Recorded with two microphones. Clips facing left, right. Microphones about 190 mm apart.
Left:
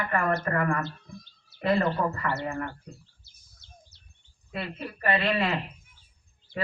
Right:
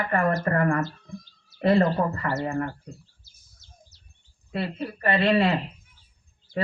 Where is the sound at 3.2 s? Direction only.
65° left (ahead or behind).